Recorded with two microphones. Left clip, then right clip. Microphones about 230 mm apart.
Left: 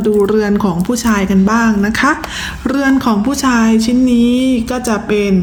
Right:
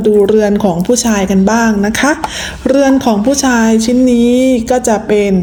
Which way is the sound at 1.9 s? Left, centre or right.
Left.